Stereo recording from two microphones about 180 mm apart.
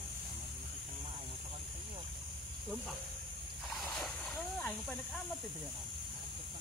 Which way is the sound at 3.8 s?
Centre (ahead or behind).